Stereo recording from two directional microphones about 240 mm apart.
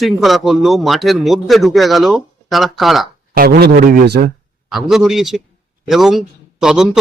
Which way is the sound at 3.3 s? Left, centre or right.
Right.